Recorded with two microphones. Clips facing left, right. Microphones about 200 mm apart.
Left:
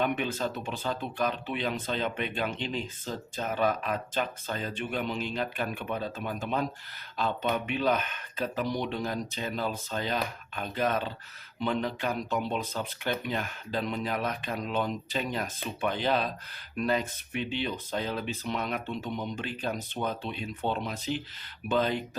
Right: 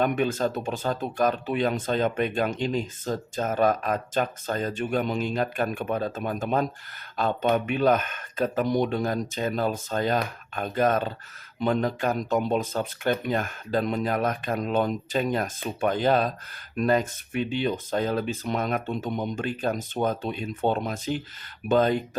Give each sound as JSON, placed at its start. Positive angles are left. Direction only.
{"t": 0.0, "sound": "speech", "side_deg": -45}